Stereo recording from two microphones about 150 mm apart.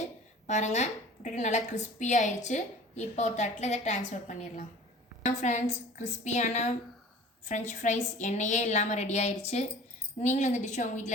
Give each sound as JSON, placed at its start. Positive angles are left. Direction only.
{"t": 0.4, "sound": "a woman's voice", "side_deg": 50}